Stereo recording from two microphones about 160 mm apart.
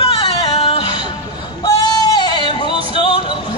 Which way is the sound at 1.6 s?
20° left (ahead or behind).